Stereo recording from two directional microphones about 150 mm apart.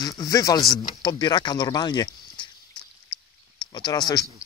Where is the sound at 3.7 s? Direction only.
30° left (ahead or behind).